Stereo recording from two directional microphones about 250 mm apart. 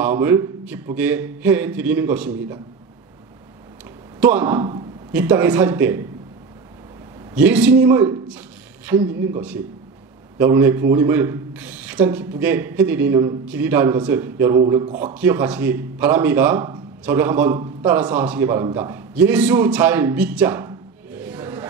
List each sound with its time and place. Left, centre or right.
0.0 s a man's voice: centre
4.2 s a man's voice: centre
7.3 s a man's voice: centre
15.1 s a man's voice: centre